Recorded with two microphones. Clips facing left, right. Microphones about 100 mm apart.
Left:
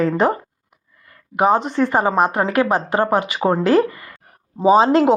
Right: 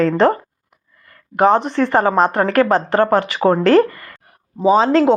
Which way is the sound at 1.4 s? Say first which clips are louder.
Right 2 dB; 15° left (ahead or behind).